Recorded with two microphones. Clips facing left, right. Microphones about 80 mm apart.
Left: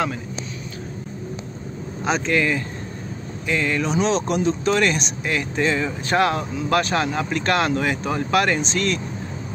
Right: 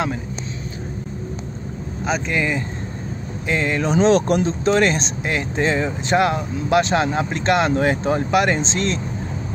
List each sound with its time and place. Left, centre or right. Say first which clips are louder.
2.0 s speech: left 1 dB; centre
2.3 s speech: left 2 dB; centre
3.4 s speech: right 1 dB; right
3.9 s speech: right 8 dB; right
4.5 s speech: right 2 dB; right